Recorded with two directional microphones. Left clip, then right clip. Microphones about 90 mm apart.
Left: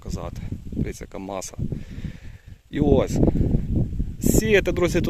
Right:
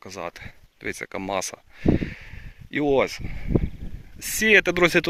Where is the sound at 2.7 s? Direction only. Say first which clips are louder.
Left 1 dB; 70° left (ahead or behind).